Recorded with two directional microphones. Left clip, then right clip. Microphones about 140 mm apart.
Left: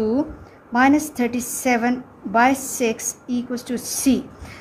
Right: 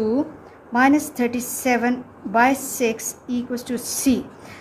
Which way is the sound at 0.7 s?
15° left (ahead or behind).